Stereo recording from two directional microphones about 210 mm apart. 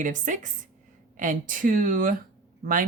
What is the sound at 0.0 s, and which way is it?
Speech, 35° right (ahead or behind).